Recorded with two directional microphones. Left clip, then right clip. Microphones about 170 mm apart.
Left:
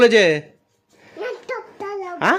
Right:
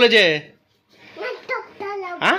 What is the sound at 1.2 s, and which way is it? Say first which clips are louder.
Dog: right 1 dB; 45° left (ahead or behind).